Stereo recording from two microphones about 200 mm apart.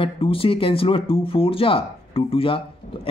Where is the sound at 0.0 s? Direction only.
25° left (ahead or behind).